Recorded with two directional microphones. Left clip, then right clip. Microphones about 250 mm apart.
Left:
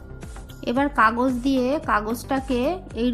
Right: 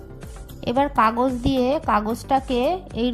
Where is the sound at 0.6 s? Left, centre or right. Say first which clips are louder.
Right 1 dB; right.